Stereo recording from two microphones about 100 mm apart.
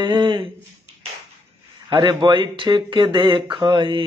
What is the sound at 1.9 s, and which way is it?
Speech, 50° right (ahead or behind).